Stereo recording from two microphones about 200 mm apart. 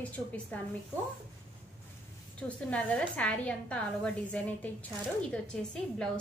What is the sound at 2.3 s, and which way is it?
A woman's voice, 5° left (ahead or behind).